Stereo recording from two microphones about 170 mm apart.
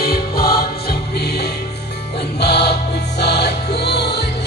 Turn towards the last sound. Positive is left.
turn(degrees=75)  # may be behind; listen again after turning